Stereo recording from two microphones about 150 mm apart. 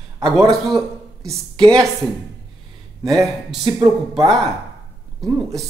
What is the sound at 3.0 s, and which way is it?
Speech, centre (ahead or behind).